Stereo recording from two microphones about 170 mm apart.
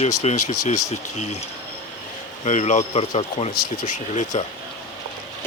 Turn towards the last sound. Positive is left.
turn(degrees=45)  # may be behind; listen again after turning